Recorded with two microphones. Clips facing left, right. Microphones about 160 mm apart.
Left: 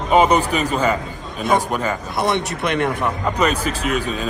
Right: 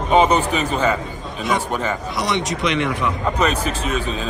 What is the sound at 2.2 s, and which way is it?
Speech, 55° left (ahead or behind).